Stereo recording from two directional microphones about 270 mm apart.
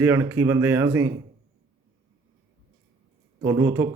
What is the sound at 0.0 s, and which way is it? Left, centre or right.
A man's voice, centre.